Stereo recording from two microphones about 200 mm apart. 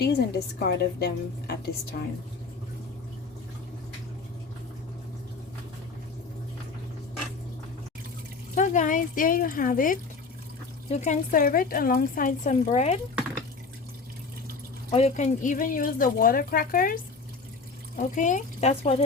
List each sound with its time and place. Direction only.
0.0 s a woman's voice: 55° left (ahead or behind)
8.5 s a woman's voice: 40° left (ahead or behind)
14.8 s a woman's voice: 30° left (ahead or behind)